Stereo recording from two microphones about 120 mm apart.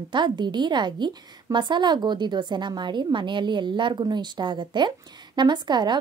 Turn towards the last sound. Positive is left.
turn(degrees=-40)  # may be behind; listen again after turning